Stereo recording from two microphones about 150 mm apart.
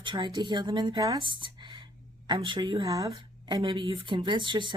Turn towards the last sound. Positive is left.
turn(degrees=-35)  # may be behind; listen again after turning